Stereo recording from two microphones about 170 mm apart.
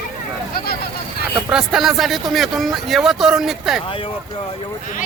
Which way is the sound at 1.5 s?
5° right (ahead or behind).